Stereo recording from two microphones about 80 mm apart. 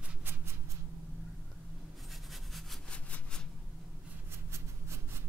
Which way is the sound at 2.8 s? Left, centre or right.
Centre.